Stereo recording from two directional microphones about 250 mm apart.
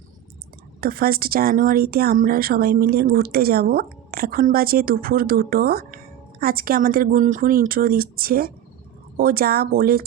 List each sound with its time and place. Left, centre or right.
0.8 s speech: right